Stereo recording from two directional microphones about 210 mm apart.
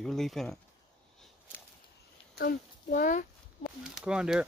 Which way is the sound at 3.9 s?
5° right (ahead or behind).